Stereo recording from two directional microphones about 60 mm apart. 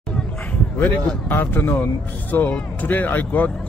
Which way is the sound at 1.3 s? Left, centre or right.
Left.